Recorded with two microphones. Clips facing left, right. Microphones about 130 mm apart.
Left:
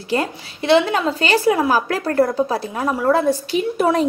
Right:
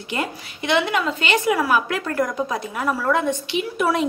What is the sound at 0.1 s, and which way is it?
A woman's voice, 35° left (ahead or behind).